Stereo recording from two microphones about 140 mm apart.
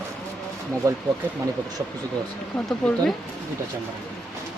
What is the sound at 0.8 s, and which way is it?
Speech, 20° right (ahead or behind).